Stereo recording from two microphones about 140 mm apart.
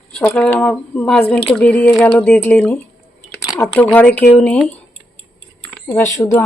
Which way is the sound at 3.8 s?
10° left (ahead or behind).